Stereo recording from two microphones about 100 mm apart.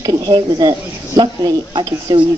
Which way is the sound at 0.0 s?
40° right (ahead or behind).